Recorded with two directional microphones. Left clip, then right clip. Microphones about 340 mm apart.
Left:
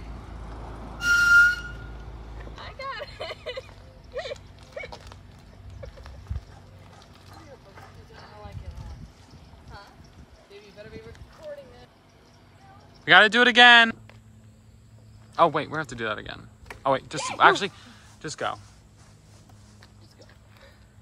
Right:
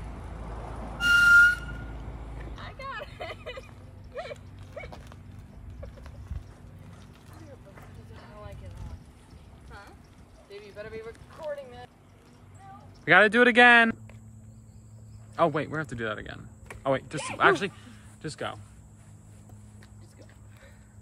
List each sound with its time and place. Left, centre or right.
0.6 s vehicle: right
1.1 s music: centre
2.5 s vehicle: left
13.0 s speech: centre
15.3 s speech: centre